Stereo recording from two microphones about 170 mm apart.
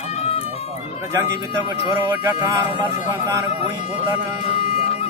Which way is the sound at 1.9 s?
20° right (ahead or behind).